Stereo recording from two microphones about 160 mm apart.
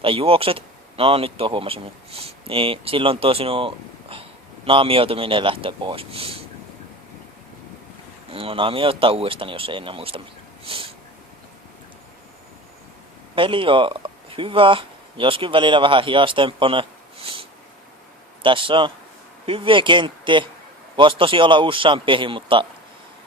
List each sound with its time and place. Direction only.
0.0 s speech: 35° right (ahead or behind)
8.3 s speech: 35° right (ahead or behind)
13.3 s speech: 35° right (ahead or behind)
18.4 s speech: 30° right (ahead or behind)